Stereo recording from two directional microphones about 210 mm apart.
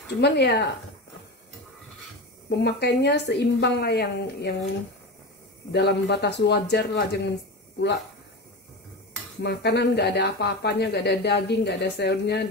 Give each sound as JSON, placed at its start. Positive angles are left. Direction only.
{"t": 0.2, "sound": "speech", "side_deg": 50}
{"t": 2.5, "sound": "speech", "side_deg": 55}
{"t": 5.7, "sound": "speech", "side_deg": 50}
{"t": 9.4, "sound": "speech", "side_deg": 55}